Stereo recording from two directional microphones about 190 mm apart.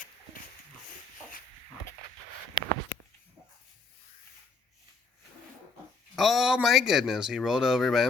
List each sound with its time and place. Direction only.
6.1 s speech: centre (ahead or behind)